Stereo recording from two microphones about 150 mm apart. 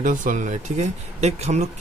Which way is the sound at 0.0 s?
60° right (ahead or behind).